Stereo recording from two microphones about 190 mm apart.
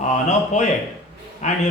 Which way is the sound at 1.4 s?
40° left (ahead or behind).